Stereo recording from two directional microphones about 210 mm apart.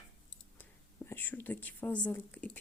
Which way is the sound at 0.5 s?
10° left (ahead or behind).